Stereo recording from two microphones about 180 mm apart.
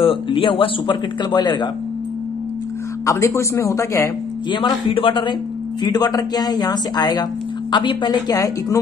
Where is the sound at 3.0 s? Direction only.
15° left (ahead or behind).